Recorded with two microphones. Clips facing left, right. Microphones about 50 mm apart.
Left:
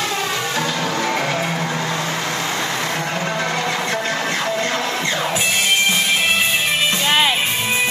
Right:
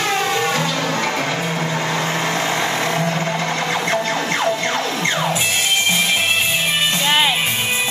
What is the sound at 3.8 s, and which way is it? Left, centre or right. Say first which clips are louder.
Music: right 1 dB; right.